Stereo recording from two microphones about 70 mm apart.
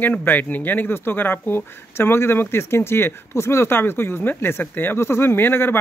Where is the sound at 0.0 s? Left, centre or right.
Left.